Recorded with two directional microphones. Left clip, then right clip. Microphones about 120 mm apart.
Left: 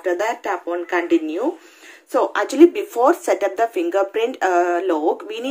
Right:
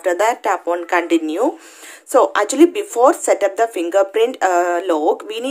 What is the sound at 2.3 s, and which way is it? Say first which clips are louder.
Speech: even; 30° right (ahead or behind).